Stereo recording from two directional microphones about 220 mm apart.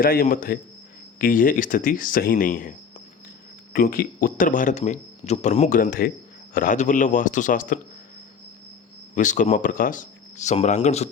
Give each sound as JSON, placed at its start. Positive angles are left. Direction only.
{"t": 0.0, "sound": "speech", "side_deg": 40}
{"t": 9.1, "sound": "speech", "side_deg": 35}